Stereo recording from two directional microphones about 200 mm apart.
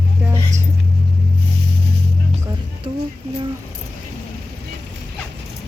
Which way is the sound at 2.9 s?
30° right (ahead or behind).